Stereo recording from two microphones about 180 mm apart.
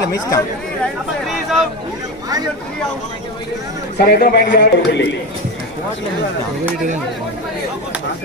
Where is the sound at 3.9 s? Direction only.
50° left (ahead or behind).